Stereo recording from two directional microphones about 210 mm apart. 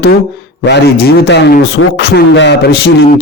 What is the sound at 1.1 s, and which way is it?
A man's voice, 50° left (ahead or behind).